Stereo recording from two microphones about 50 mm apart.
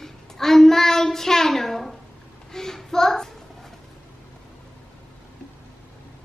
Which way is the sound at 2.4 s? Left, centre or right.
Centre.